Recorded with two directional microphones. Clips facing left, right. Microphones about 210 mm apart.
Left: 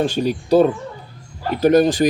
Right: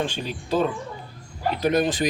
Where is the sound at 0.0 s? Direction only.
40° left (ahead or behind).